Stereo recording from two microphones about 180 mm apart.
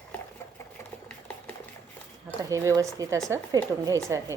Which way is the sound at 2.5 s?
15° right (ahead or behind).